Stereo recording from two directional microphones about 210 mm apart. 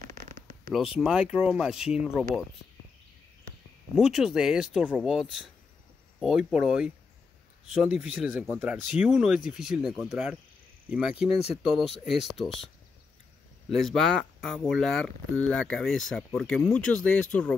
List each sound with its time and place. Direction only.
0.7 s speech: 5° right (ahead or behind)
3.9 s speech: centre (ahead or behind)